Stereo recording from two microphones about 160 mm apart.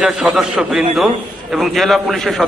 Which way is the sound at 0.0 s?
5° right (ahead or behind).